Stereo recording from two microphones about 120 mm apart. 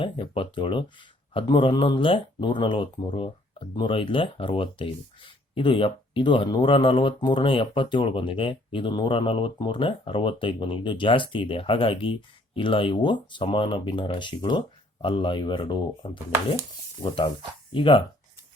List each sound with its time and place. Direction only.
0.0 s speech: 45° left (ahead or behind)
17.2 s speech: 45° left (ahead or behind)